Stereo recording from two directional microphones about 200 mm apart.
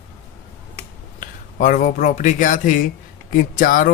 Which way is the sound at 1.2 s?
40° left (ahead or behind).